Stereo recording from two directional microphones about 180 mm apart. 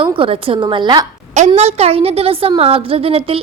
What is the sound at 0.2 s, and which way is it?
Speech, 30° right (ahead or behind).